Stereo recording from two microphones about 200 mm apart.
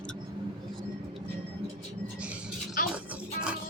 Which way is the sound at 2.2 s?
5° right (ahead or behind).